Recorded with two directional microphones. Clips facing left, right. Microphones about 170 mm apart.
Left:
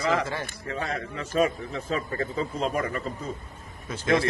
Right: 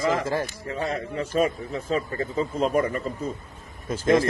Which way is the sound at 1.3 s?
45° right (ahead or behind).